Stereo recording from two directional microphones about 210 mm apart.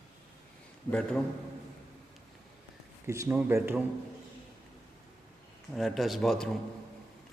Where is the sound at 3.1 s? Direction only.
15° right (ahead or behind).